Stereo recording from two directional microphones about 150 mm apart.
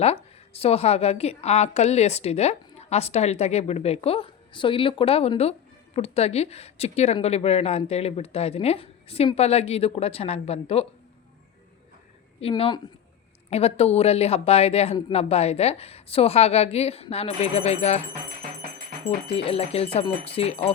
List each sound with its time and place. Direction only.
0.0 s a woman's voice: 40° left (ahead or behind)
12.4 s a woman's voice: 40° left (ahead or behind)
19.4 s speech: 40° left (ahead or behind)